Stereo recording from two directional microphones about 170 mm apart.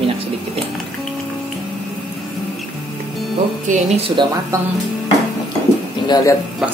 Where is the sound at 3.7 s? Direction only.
35° right (ahead or behind).